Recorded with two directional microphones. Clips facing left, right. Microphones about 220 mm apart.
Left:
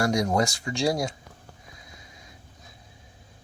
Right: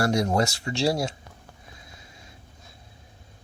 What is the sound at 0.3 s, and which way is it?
Speech, 30° right (ahead or behind).